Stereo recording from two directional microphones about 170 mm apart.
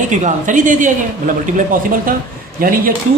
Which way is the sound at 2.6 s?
55° right (ahead or behind).